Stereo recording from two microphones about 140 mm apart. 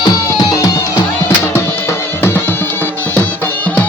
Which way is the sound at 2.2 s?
15° left (ahead or behind).